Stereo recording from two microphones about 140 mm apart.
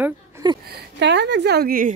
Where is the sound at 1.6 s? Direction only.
85° right.